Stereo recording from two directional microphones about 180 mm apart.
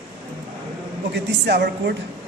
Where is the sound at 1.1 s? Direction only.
70° right (ahead or behind).